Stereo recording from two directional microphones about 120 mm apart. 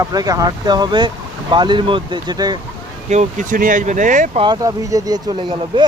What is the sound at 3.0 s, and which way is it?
Speech, 80° right.